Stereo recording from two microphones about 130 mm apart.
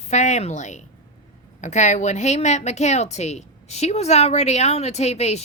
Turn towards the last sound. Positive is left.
turn(degrees=55)  # may be behind; listen again after turning